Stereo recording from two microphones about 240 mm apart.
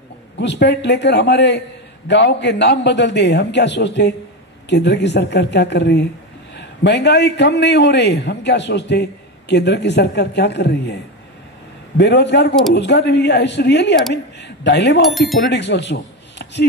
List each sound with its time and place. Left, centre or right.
0.4 s a man's voice: left
12.0 s a man's voice: left
15.0 s speech: centre
15.4 s a man's voice: left